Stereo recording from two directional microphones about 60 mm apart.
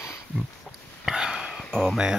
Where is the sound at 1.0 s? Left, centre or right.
Centre.